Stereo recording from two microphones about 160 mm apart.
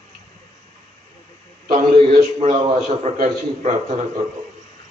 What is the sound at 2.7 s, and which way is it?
A man's voice, 50° right (ahead or behind).